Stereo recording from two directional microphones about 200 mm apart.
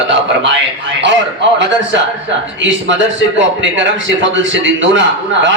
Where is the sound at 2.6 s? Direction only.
65° right (ahead or behind).